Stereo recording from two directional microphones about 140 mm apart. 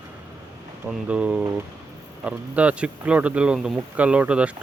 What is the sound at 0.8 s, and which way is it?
Speech, 5° right (ahead or behind).